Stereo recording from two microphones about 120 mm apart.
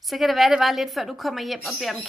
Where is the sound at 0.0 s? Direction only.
Centre (ahead or behind).